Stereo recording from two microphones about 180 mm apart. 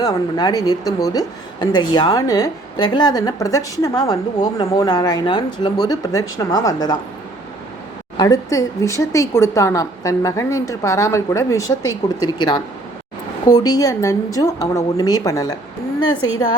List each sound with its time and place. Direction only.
0.0 s speech: 20° left (ahead or behind)
8.2 s a woman's voice: 20° left (ahead or behind)